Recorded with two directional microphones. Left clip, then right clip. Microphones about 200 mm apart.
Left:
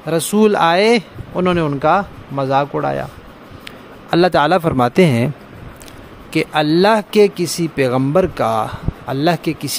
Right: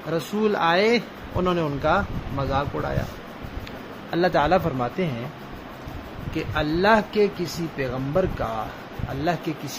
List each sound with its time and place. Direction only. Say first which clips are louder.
0.1 s speech: left 9 dB; 60° left (ahead or behind)
4.1 s speech: left 7 dB; 55° left (ahead or behind)
6.3 s speech: left 10 dB; 55° left (ahead or behind)